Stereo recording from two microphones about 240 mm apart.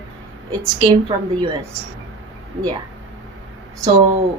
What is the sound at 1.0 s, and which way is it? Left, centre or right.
Speech, centre.